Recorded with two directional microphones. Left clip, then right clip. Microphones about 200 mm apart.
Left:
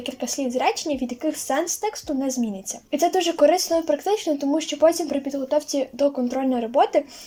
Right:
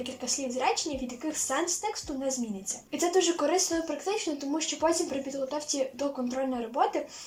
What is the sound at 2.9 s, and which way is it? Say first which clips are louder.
Speech: left 6 dB; 45° left (ahead or behind).